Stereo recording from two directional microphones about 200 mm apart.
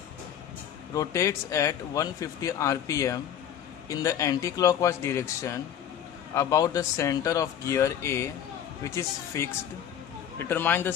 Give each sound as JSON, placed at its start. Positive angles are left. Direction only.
{"t": 0.9, "sound": "speech", "side_deg": 15}